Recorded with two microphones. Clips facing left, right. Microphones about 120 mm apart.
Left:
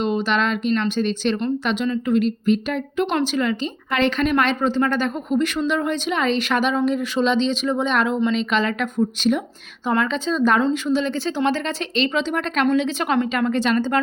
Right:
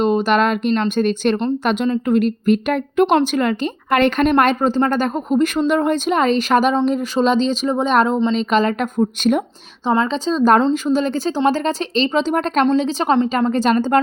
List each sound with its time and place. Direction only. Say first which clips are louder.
0.0 s a woman's voice: right 5 dB; 45° right (ahead or behind)
9.8 s speech: right 3 dB; 25° right (ahead or behind); by 14.0 s 45° right (ahead or behind)